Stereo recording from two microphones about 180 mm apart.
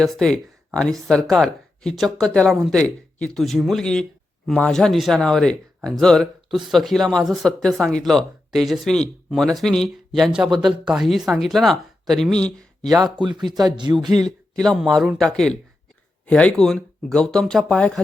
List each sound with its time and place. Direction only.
0.0 s speech: 5° left (ahead or behind)
13.6 s speech: 25° right (ahead or behind)
14.6 s speech: centre (ahead or behind)